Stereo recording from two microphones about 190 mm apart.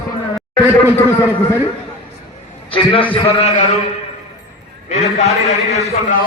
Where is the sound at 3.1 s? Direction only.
30° left (ahead or behind).